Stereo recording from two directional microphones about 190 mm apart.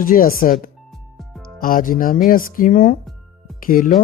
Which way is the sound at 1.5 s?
50° left (ahead or behind).